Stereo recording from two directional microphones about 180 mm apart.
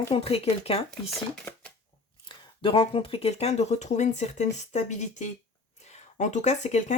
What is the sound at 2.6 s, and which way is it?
Speech, 30° left (ahead or behind).